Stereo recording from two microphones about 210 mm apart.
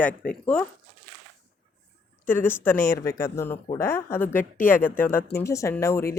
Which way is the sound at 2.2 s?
10° left (ahead or behind).